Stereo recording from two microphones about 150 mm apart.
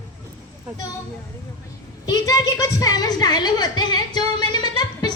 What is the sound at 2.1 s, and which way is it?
A woman's voice, 25° left (ahead or behind).